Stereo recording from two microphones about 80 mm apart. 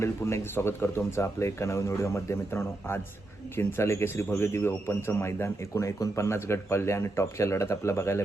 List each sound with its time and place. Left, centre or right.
0.0 s a man's voice: left